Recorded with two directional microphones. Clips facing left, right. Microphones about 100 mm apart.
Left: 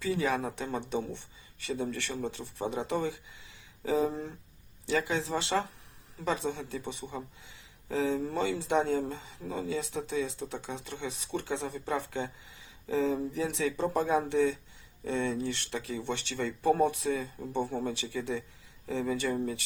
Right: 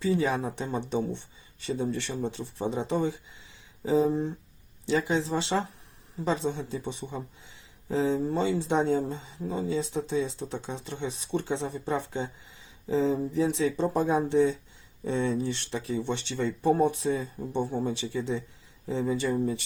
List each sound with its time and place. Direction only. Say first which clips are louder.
0.0 s speech: right 3 dB; 20° right (ahead or behind)
1.6 s speech: right 4 dB; 25° right (ahead or behind)
17.4 s speech: right 3 dB; 15° right (ahead or behind)